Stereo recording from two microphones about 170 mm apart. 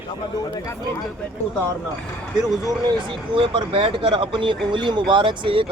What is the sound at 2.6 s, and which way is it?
Speech, 30° right (ahead or behind).